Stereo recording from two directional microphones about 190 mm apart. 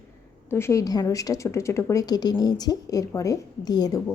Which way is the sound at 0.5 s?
15° left (ahead or behind).